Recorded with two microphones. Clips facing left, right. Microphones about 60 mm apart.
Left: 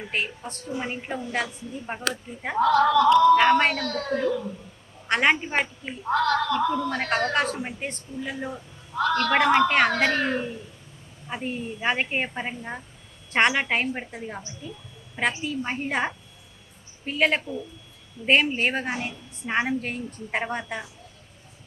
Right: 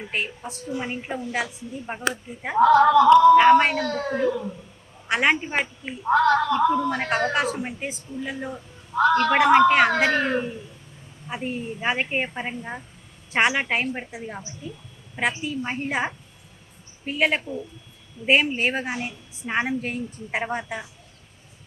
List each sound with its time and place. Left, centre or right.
0.1 s a woman's voice: centre
2.6 s speech: centre
3.3 s speech: centre
5.0 s a woman's voice: centre
6.1 s a woman's voice: centre
8.9 s a man's voice: centre
9.3 s speech: centre
11.3 s a woman's voice: centre
15.4 s a woman's voice: centre
17.4 s speech: right
18.3 s a woman's voice: centre